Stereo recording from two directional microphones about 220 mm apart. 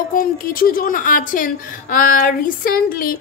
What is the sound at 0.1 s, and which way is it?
A woman's voice, 40° left (ahead or behind).